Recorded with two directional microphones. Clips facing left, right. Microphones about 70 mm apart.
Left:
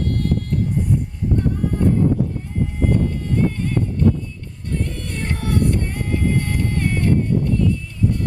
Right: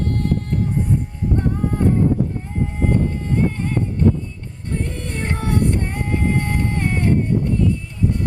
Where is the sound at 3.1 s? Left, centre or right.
Right.